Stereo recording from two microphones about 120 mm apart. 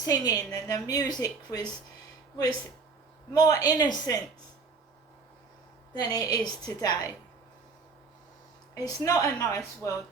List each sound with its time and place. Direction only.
0.0 s a woman's voice: 30° left (ahead or behind)
3.3 s a woman's voice: 30° left (ahead or behind)
5.9 s a woman's voice: 35° left (ahead or behind)
8.7 s a woman's voice: 30° left (ahead or behind)